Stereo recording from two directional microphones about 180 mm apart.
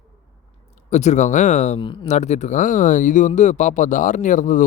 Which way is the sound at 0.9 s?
40° left (ahead or behind).